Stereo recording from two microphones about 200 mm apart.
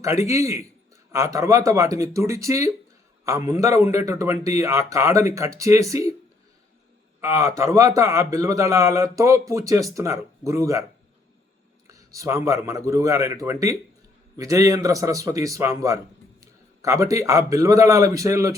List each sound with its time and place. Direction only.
0.0 s a man's voice: 15° right (ahead or behind)
7.2 s a man's voice: 15° right (ahead or behind)
11.9 s a man's voice: 15° right (ahead or behind)